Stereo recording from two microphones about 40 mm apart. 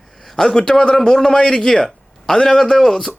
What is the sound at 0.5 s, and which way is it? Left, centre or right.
A man's voice, centre.